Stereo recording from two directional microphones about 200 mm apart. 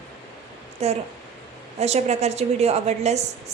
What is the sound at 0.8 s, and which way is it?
A woman's voice, 30° right (ahead or behind).